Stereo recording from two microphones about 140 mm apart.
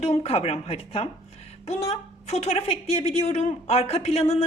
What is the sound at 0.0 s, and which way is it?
A woman's voice, 50° left (ahead or behind).